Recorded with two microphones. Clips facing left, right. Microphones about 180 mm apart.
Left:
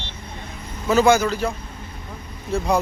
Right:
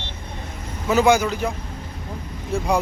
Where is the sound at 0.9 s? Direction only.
15° right (ahead or behind).